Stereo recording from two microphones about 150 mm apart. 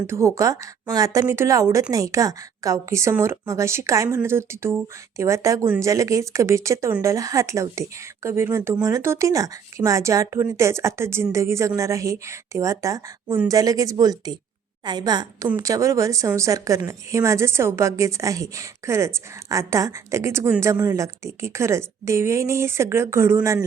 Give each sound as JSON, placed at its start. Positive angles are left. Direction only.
{"t": 0.1, "sound": "a woman's voice", "side_deg": -20}
{"t": 13.2, "sound": "a woman's voice", "side_deg": -10}
{"t": 13.5, "sound": "speech", "side_deg": -25}